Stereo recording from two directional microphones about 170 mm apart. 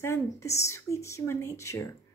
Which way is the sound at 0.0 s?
15° left (ahead or behind).